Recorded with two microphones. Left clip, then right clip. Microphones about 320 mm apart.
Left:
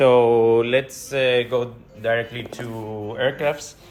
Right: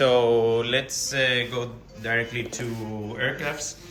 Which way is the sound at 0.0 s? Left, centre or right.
Centre.